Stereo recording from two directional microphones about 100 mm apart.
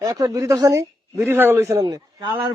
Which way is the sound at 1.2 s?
20° right (ahead or behind).